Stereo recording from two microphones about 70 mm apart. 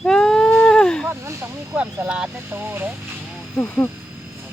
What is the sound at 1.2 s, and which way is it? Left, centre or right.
Snake, right.